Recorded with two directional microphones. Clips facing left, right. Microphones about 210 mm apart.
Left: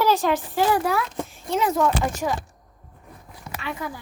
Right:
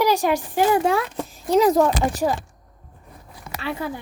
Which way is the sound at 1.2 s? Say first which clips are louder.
Right 7 dB; 40° right (ahead or behind).